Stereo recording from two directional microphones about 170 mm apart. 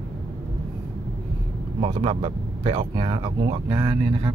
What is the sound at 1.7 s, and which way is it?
Speech, 30° right (ahead or behind).